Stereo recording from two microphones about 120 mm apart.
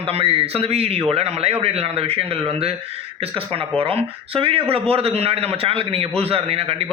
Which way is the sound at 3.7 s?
50° right (ahead or behind).